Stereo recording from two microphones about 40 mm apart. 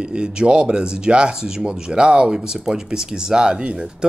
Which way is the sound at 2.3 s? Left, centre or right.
Centre.